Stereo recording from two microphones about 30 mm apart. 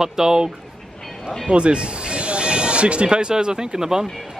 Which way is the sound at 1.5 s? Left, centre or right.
Right.